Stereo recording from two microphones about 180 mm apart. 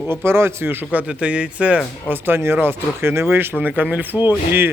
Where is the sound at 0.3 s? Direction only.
15° right (ahead or behind).